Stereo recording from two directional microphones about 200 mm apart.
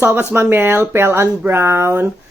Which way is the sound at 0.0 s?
10° right (ahead or behind).